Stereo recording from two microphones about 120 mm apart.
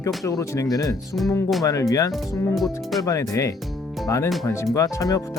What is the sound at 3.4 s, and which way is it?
Speech, 25° left (ahead or behind).